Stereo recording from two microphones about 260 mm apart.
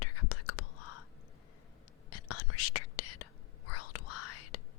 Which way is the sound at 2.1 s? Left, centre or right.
Left.